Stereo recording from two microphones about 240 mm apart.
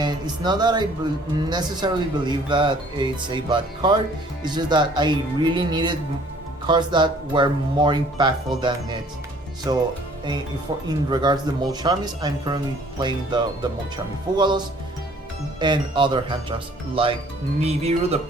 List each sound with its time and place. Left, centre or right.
0.0 s speech: centre
11.1 s speech: centre